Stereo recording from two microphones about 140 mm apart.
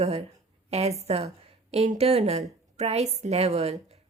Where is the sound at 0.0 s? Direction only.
45° right (ahead or behind).